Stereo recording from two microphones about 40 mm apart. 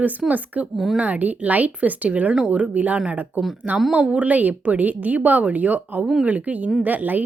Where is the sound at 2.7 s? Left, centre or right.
Right.